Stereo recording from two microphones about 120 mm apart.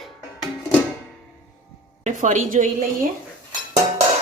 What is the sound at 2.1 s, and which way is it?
Speech, 90° right.